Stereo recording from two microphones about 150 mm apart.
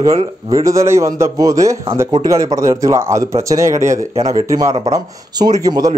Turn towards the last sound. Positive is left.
turn(degrees=-25)  # may be behind; listen again after turning